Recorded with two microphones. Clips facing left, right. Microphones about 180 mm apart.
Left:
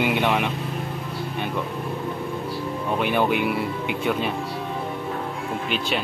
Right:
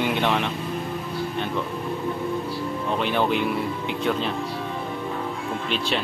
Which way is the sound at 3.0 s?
10° left (ahead or behind).